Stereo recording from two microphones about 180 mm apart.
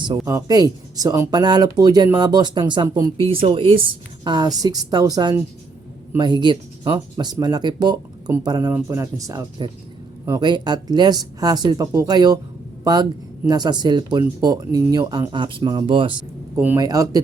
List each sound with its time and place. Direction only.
0.0 s speech: 20° right (ahead or behind)
16.6 s speech: 10° right (ahead or behind)